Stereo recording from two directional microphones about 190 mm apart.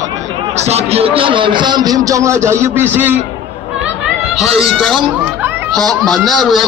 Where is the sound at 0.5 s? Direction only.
35° right (ahead or behind); by 3.2 s 10° right (ahead or behind).